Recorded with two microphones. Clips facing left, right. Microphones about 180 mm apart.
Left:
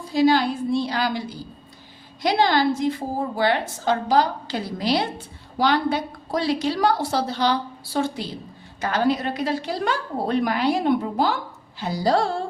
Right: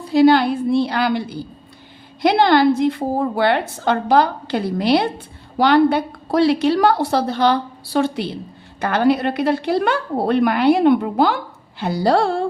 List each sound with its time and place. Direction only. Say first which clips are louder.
0.0 s a woman's voice: right 6 dB; 65° right (ahead or behind)